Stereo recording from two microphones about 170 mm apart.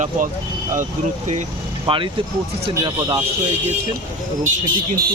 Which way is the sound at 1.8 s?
30° right (ahead or behind).